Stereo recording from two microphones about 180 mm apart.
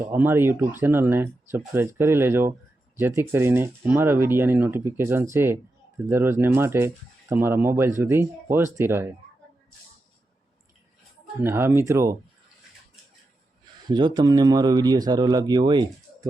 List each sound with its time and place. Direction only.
0.0 s speech: 10° right (ahead or behind)
11.4 s speech: 15° right (ahead or behind)
13.8 s speech: 25° right (ahead or behind)